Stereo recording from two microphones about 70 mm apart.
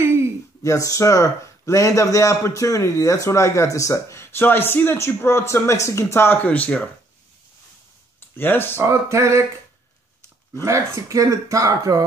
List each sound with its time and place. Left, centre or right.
0.0 s a sound: right
0.7 s a man's voice: left
6.4 s speech: left
8.4 s speech: left
8.7 s speech: right
10.6 s speech: right